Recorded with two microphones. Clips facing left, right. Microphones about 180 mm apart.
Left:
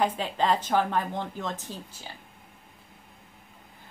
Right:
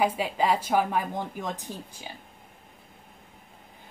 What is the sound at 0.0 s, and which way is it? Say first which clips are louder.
A woman's voice: right 1 dB; 10° right (ahead or behind).